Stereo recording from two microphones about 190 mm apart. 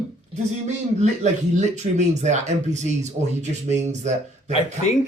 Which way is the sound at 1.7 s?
35° right (ahead or behind).